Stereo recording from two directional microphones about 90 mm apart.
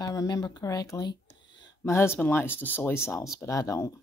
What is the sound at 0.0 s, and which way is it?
Speech, 45° left (ahead or behind).